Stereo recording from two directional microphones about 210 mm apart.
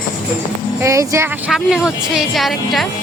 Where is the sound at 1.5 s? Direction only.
Centre (ahead or behind).